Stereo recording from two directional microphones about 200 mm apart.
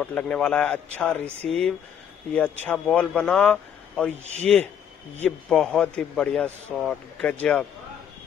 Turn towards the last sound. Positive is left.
turn(degrees=5)  # may be behind; listen again after turning